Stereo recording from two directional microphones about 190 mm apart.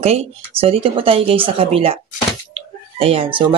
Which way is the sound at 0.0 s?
30° right (ahead or behind).